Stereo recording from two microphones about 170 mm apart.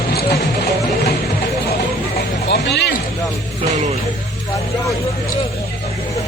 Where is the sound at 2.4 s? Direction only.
90° left.